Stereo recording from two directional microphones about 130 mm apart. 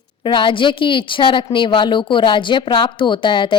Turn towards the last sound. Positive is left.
turn(degrees=40)  # may be behind; listen again after turning